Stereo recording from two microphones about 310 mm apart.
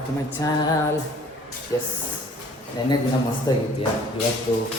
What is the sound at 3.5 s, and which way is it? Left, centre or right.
Speech, centre.